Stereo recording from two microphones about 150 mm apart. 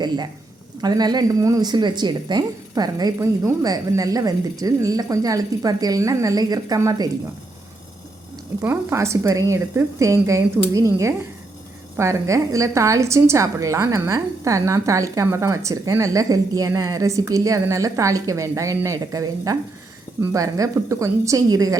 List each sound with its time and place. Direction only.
0.8 s a woman's voice: 25° right (ahead or behind)
8.6 s a woman's voice: 15° right (ahead or behind)